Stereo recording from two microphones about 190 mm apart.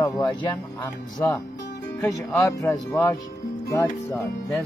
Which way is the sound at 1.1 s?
10° left (ahead or behind).